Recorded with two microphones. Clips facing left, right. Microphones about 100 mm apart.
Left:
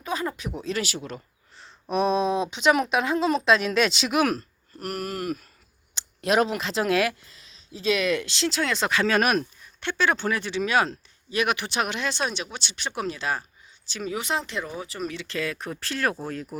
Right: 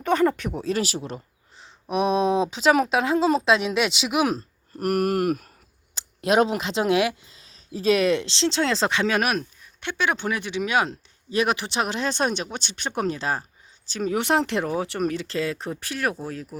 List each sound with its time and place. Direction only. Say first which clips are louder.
0.0 s speech: right 9 dB; 65° right (ahead or behind); by 1.2 s 30° right (ahead or behind)
1.9 s speech: right 2 dB; 15° right (ahead or behind)
2.5 s speech: right 2 dB; 35° right (ahead or behind); by 4.4 s 15° right (ahead or behind)
4.8 s speech: right 9 dB; 55° right (ahead or behind)
5.9 s speech: right 2 dB; 35° right (ahead or behind)
7.4 s speech: right 4 dB; 40° right (ahead or behind); by 9.2 s 15° right (ahead or behind)
9.2 s speech: left 2 dB; centre (ahead or behind)
9.8 s speech: left 1 dB; 15° right (ahead or behind)
11.3 s speech: right 2 dB; 30° right (ahead or behind)
14.2 s speech: right 7 dB; 65° right (ahead or behind)
15.0 s speech: right 6 dB; 45° right (ahead or behind)
15.4 s speech: even; 30° right (ahead or behind)
15.8 s speech: left 2 dB; 10° right (ahead or behind)